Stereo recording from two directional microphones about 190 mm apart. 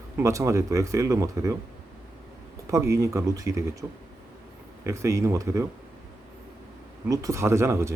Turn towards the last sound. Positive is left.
turn(degrees=-15)  # may be behind; listen again after turning